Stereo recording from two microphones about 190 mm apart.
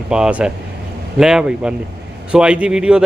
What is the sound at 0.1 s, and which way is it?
Speech, 5° right (ahead or behind).